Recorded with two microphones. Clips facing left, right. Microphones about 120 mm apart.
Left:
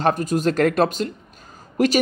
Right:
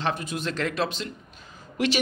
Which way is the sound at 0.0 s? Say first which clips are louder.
Left 9 dB; 45° left (ahead or behind).